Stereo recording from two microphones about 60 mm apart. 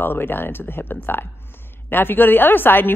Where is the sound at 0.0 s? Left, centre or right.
Left.